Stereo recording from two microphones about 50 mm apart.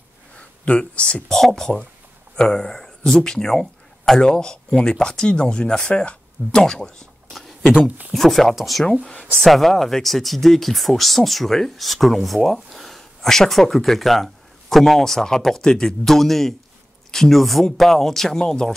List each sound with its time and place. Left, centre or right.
0.4 s speech: left
1.3 s speech: centre
8.1 s speech: centre